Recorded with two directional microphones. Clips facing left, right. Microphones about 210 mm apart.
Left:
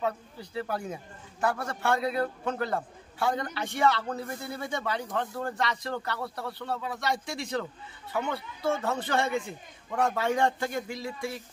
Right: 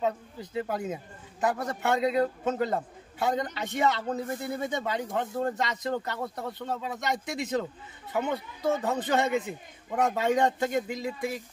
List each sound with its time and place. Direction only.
0.0 s a man's voice: 20° right (ahead or behind)